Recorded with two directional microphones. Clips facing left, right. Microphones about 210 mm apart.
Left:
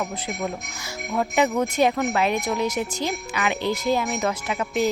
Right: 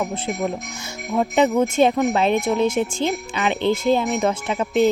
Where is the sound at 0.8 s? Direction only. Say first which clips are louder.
Right 3 dB; 20° right (ahead or behind).